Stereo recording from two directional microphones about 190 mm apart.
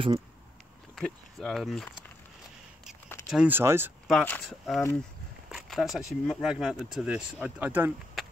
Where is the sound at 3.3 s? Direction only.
10° right (ahead or behind).